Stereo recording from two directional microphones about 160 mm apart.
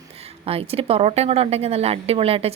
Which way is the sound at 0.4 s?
35° right (ahead or behind).